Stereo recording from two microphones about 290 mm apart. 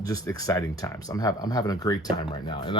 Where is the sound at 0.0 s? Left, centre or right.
Centre.